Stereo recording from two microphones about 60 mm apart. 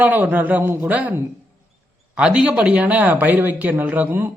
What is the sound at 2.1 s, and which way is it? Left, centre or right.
Speech, centre.